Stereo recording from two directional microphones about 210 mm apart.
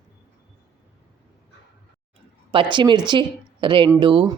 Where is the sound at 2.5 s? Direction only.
20° right (ahead or behind).